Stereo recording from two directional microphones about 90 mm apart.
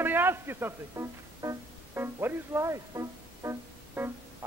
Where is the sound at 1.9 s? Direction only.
25° right (ahead or behind).